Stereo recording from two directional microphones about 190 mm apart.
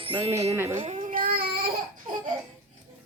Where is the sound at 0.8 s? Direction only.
40° right (ahead or behind).